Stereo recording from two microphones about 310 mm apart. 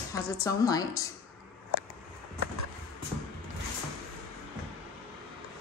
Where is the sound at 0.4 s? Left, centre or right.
Centre.